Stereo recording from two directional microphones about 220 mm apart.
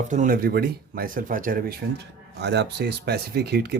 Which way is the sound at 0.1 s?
35° right (ahead or behind).